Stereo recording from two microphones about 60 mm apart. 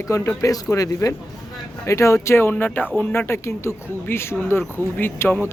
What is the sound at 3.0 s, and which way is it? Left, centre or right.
A man's voice, left.